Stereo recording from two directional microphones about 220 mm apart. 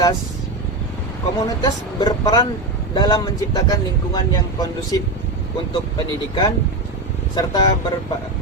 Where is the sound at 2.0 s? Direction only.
20° left (ahead or behind).